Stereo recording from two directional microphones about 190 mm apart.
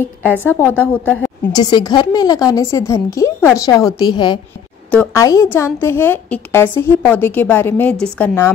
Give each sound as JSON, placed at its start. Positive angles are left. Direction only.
{"t": 0.4, "sound": "a woman's voice", "side_deg": 10}
{"t": 1.5, "sound": "a woman's voice", "side_deg": 20}